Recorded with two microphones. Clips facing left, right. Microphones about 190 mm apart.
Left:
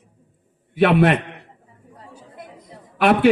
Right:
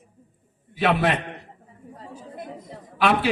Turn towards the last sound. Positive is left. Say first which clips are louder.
# left 6 dB
turn(degrees=55)  # may be behind; listen again after turning